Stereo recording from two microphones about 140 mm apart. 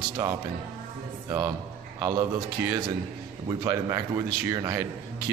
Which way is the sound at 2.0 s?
15° right (ahead or behind).